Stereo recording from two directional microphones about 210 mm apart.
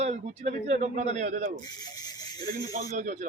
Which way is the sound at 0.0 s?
30° right (ahead or behind).